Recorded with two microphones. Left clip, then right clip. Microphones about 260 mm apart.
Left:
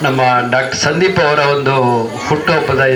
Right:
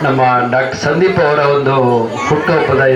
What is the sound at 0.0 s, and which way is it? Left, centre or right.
Speech, centre.